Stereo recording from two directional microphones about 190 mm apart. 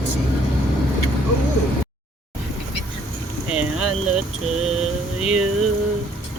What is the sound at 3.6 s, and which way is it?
Speech, 5° right (ahead or behind).